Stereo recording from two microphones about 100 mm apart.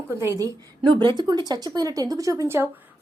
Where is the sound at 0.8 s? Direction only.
50° right (ahead or behind); by 2.6 s 30° right (ahead or behind).